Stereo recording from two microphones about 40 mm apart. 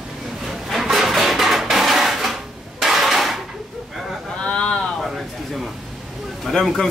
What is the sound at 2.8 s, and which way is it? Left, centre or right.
Hammer, centre.